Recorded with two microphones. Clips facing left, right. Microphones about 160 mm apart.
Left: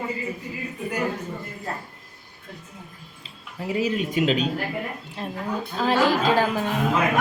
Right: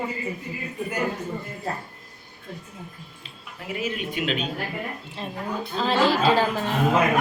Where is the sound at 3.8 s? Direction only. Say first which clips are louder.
Left 5 dB; 35° left (ahead or behind).